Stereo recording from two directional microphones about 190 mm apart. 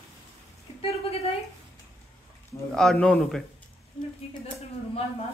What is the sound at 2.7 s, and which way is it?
Speech, 5° left (ahead or behind).